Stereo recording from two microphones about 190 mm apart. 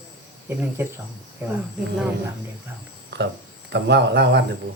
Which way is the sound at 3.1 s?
65° right (ahead or behind).